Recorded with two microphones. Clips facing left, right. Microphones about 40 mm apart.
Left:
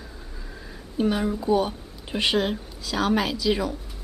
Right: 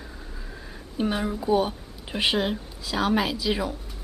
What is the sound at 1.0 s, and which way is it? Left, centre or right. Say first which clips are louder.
Speech: left 3 dB; centre.